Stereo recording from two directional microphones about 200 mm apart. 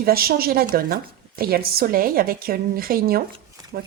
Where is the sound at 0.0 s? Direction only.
50° right (ahead or behind).